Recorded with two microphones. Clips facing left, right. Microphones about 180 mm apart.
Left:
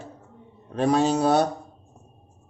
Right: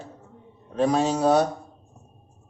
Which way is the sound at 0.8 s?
65° left (ahead or behind).